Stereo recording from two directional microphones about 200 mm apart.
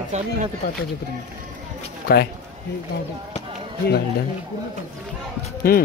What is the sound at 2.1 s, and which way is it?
Speech, 50° left (ahead or behind).